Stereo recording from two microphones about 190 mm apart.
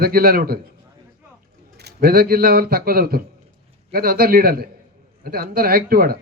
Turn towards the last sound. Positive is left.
turn(degrees=-50)  # may be behind; listen again after turning